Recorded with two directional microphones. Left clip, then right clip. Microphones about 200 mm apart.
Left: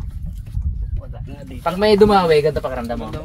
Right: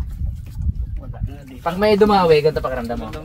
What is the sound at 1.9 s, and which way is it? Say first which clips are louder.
Speech: left 1 dB; 10° left (ahead or behind).